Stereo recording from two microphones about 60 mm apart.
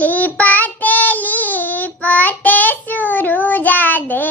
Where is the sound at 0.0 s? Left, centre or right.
Left.